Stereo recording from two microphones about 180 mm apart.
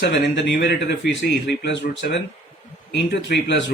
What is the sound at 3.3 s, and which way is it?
Speech, 85° left.